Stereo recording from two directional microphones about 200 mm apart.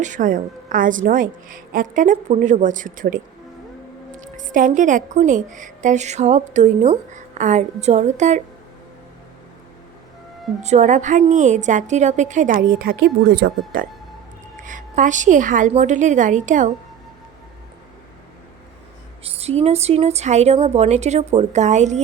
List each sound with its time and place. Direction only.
0.0 s a woman's voice: 40° right (ahead or behind)
4.2 s a woman's voice: 40° right (ahead or behind)
10.6 s a woman's voice: 35° right (ahead or behind); by 13.8 s 50° right (ahead or behind)
14.5 s a woman's voice: 40° right (ahead or behind)
19.2 s a woman's voice: 30° right (ahead or behind)